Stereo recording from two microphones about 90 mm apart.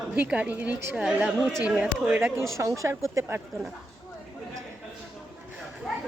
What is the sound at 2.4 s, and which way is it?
Speech, 35° right (ahead or behind).